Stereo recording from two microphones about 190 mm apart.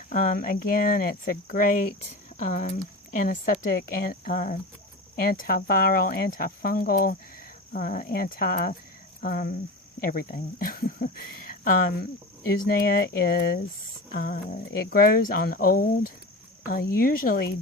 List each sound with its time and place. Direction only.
0.1 s speech: 45° left (ahead or behind)